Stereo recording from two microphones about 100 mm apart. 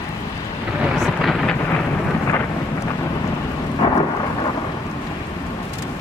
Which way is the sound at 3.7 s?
60° left (ahead or behind).